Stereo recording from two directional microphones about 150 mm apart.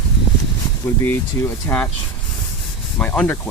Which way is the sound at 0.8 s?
15° left (ahead or behind).